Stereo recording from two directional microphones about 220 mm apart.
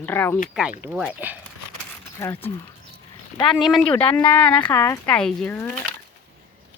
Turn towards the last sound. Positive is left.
turn(degrees=10)  # may be behind; listen again after turning